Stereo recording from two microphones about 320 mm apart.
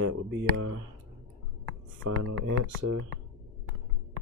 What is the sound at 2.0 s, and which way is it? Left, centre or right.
Speech, right.